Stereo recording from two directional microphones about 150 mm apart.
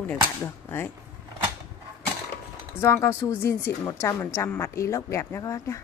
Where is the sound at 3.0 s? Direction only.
20° left (ahead or behind).